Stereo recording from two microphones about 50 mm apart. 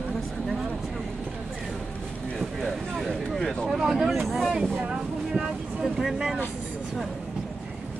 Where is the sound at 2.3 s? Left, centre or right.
Centre.